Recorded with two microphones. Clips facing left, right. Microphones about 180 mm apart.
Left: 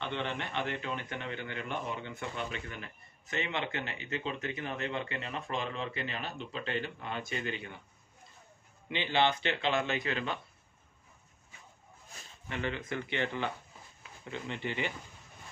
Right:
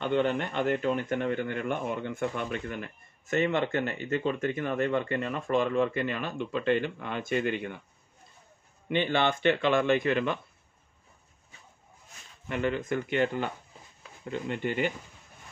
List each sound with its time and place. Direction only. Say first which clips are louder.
0.0 s a man's voice: right 10 dB; 45° right (ahead or behind)
8.8 s a man's voice: right 3 dB; 50° right (ahead or behind)
12.4 s a man's voice: right 7 dB; 50° right (ahead or behind)